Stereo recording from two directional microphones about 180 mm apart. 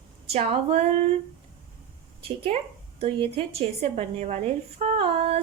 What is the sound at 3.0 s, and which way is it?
A woman's voice, 35° right (ahead or behind).